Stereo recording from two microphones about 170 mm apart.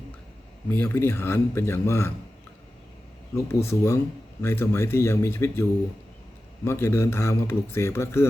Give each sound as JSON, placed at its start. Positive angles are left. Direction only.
{"t": 0.7, "sound": "speech", "side_deg": 10}
{"t": 3.3, "sound": "speech", "side_deg": 15}
{"t": 6.7, "sound": "speech", "side_deg": 15}